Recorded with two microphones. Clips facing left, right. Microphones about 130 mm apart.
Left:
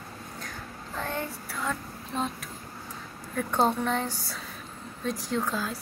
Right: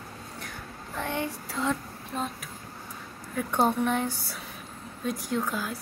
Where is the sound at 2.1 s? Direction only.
5° right (ahead or behind).